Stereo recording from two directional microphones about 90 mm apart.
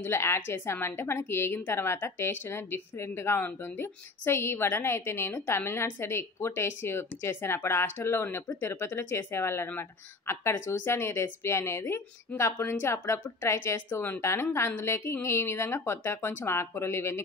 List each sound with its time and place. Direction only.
0.0 s speech: 30° left (ahead or behind)